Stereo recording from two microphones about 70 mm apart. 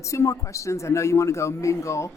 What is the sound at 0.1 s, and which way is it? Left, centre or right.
A man's voice, left.